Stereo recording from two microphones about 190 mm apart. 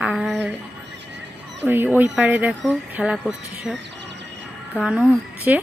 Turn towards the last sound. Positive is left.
turn(degrees=-5)  # may be behind; listen again after turning